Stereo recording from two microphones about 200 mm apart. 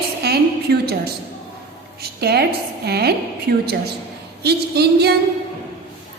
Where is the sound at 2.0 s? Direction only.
55° right (ahead or behind).